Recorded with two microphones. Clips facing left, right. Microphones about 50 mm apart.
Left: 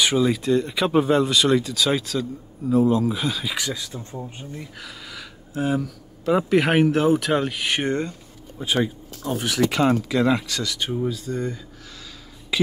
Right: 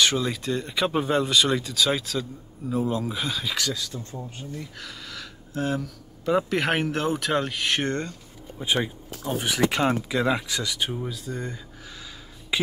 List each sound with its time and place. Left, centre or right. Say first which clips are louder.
0.0 s speech: left 4 dB; centre
3.5 s speech: even; centre
4.7 s a sound: left 1 dB; centre
5.6 s speech: left 4 dB; centre
8.5 s speech: left 3 dB; centre